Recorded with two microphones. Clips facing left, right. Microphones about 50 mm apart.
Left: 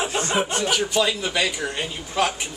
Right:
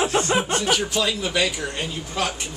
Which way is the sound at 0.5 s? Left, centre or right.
Centre.